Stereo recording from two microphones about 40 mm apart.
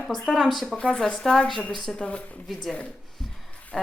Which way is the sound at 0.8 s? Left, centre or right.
Left.